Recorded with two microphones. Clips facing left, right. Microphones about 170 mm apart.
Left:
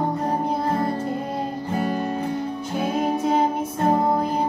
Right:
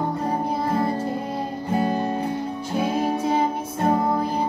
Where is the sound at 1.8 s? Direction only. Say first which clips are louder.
Right 2 dB; 35° right (ahead or behind).